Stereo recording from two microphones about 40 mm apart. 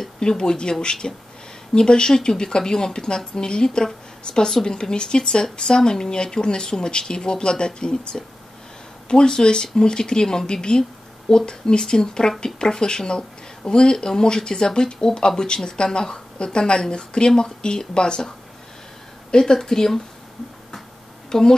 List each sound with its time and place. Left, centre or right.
0.2 s speech: centre
19.3 s speech: centre
21.3 s speech: centre